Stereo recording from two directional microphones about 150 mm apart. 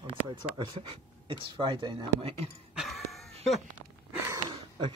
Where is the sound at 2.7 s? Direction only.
Centre (ahead or behind).